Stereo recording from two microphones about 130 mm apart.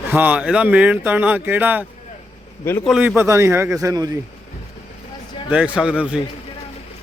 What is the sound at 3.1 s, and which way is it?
Speech, 20° right (ahead or behind).